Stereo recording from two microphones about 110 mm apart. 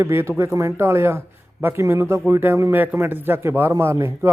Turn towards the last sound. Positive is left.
turn(degrees=-25)  # may be behind; listen again after turning